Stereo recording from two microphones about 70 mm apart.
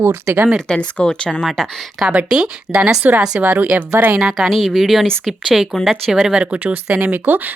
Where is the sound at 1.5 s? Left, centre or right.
Centre.